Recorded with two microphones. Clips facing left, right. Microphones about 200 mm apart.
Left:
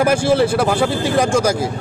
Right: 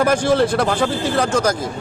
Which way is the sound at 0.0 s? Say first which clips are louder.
Left 1 dB; 10° left (ahead or behind).